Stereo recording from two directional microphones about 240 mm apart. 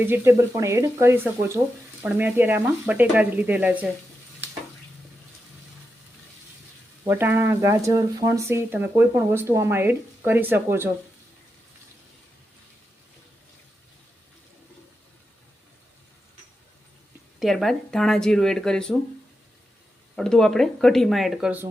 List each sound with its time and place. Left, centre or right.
0.0 s speech: centre
7.1 s speech: centre
17.4 s speech: centre
20.1 s speech: centre